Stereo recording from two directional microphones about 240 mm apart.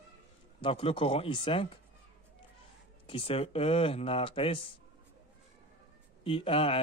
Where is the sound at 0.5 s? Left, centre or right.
Left.